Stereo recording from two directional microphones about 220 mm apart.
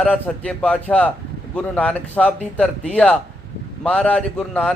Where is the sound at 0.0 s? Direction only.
5° left (ahead or behind).